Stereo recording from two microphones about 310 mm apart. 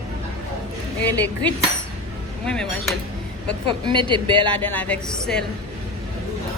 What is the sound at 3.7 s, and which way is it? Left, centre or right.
Speech, centre.